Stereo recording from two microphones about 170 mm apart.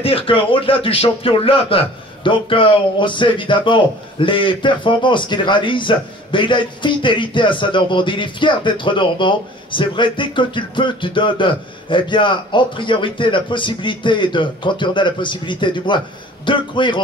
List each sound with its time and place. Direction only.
0.0 s speech: 30° left (ahead or behind)